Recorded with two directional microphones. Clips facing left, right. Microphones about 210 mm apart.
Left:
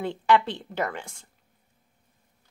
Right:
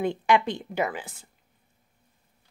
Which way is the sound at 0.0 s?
15° right (ahead or behind).